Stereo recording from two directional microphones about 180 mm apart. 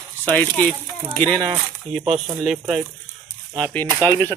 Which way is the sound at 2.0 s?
35° right (ahead or behind).